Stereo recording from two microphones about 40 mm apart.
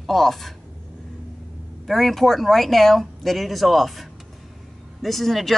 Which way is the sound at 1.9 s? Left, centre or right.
Centre.